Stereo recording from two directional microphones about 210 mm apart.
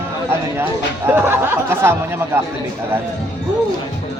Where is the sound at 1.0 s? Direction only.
10° right (ahead or behind).